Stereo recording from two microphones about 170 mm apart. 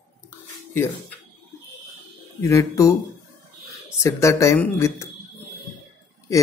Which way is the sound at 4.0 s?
15° left (ahead or behind).